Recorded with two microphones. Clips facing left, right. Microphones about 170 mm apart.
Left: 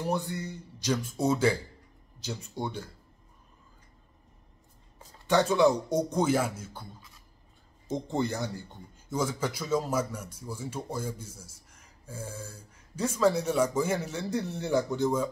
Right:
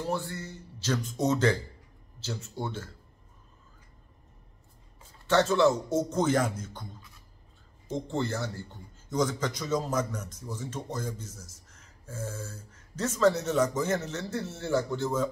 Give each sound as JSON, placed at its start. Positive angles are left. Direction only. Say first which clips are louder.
{"t": 0.0, "sound": "a man's voice", "louder": "left 2 dB", "side_deg": 15}
{"t": 5.2, "sound": "a man's voice", "louder": "even", "side_deg": 15}
{"t": 8.1, "sound": "a man's voice", "louder": "left 2 dB", "side_deg": 15}